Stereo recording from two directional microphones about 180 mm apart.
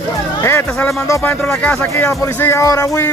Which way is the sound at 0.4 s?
15° left (ahead or behind).